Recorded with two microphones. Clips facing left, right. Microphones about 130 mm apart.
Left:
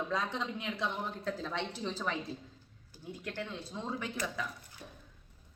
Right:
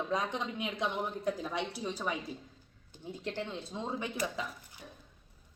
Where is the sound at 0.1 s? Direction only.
20° right (ahead or behind).